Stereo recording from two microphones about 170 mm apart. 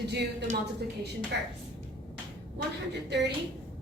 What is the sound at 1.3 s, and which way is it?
Speech, 75° right (ahead or behind).